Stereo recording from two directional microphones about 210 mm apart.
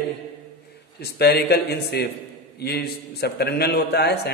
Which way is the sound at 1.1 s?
50° left (ahead or behind).